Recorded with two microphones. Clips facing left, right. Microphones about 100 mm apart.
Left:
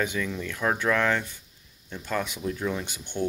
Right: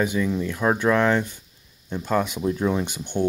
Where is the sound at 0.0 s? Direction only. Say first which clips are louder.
Right 6 dB; 15° right (ahead or behind).